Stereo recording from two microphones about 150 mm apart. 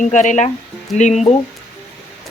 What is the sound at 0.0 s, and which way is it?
Speech, 55° left (ahead or behind).